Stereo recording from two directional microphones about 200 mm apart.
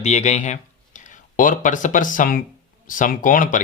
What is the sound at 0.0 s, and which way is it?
Speech, 35° left (ahead or behind).